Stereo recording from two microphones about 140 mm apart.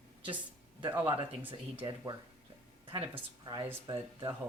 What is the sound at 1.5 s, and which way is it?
Speech, 40° right (ahead or behind).